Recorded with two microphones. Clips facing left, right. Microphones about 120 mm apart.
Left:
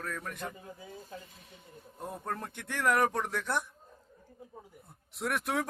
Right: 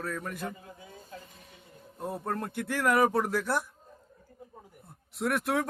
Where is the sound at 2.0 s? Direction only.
5° right (ahead or behind).